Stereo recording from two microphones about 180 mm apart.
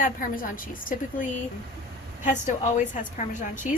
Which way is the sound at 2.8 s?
45° left (ahead or behind).